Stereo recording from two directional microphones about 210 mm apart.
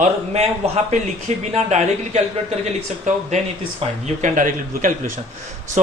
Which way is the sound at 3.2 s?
35° right (ahead or behind).